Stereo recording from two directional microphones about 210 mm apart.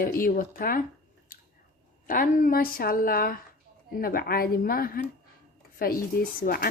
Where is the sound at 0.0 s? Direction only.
45° left (ahead or behind).